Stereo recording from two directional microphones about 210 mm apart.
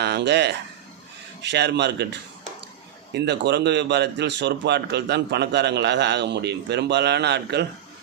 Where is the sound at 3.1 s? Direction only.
55° right (ahead or behind).